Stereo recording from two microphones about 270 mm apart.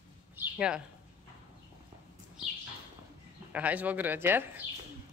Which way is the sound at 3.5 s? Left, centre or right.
Centre.